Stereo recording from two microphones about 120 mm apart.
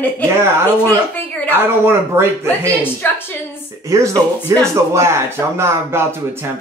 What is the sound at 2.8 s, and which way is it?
Speech, 20° left (ahead or behind).